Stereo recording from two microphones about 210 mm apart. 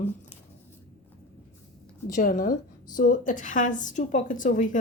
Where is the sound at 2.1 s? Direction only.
40° left (ahead or behind).